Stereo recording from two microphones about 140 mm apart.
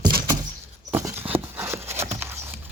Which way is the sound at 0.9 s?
15° right (ahead or behind).